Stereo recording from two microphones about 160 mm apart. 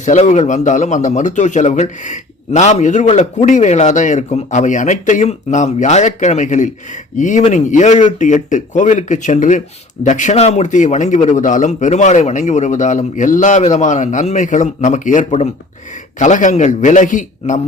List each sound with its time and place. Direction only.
0.0 s speech: 50° left (ahead or behind)